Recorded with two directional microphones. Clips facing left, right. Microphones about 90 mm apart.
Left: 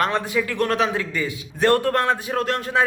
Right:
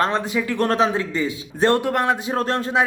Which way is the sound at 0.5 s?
35° right (ahead or behind).